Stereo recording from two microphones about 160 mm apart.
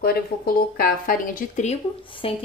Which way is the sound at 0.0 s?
70° left (ahead or behind).